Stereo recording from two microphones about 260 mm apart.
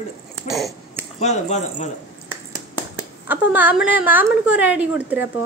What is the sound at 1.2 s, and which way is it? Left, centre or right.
Speech, left.